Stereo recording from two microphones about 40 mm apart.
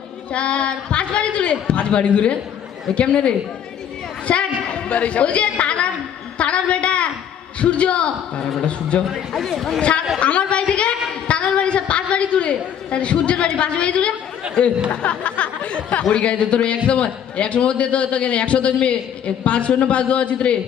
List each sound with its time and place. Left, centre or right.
0.3 s a man's voice: left
4.3 s a sound: left
7.6 s a man's voice: left
9.3 s speech: centre
10.2 s a man's voice: left
15.0 s a sound: left
16.0 s a man's voice: left